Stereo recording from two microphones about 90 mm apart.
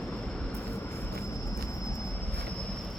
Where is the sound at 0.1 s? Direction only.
5° left (ahead or behind).